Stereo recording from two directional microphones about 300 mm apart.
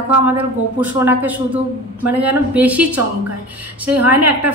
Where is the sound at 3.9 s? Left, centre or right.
Right.